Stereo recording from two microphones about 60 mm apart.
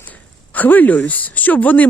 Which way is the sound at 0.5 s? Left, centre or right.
Left.